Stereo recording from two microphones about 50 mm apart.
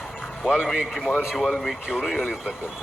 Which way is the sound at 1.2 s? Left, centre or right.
Centre.